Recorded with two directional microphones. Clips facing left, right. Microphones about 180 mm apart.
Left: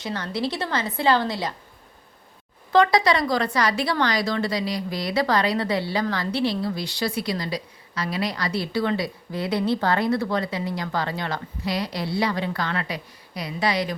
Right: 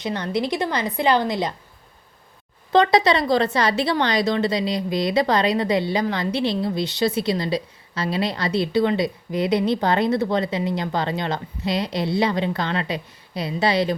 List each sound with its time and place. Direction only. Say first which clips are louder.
0.0 s a woman's voice: right 3 dB; 20° right (ahead or behind)
2.7 s a woman's voice: right 2 dB; 25° right (ahead or behind)